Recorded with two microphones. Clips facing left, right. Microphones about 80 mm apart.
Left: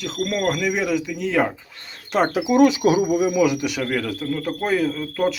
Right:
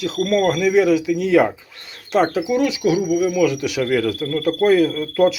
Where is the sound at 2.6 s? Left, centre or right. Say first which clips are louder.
Left 4 dB; left.